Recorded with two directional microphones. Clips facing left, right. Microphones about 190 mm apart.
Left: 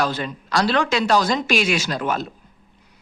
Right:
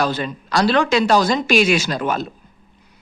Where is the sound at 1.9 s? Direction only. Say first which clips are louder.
Right 2 dB; 30° right (ahead or behind).